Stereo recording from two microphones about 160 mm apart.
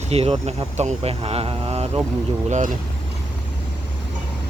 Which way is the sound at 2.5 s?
50° right (ahead or behind).